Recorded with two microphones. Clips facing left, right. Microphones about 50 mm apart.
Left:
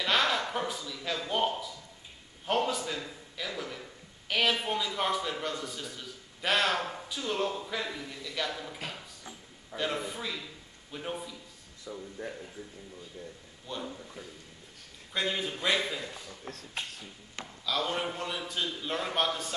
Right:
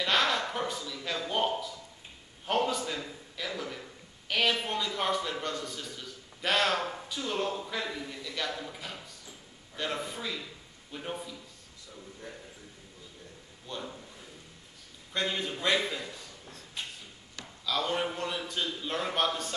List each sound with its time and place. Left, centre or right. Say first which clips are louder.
0.0 s a sound: even; centre
2.4 s a man's voice: even; centre
11.9 s speech: left 9 dB; left
13.7 s a sound: left 1 dB; centre
15.1 s a man's voice: even; centre
16.5 s speech: left 6 dB; left
17.6 s a man's voice: right 1 dB; centre